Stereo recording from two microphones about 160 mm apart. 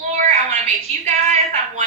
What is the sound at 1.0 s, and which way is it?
Speech, 50° right (ahead or behind).